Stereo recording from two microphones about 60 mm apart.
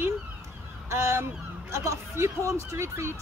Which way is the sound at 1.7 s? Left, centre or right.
Right.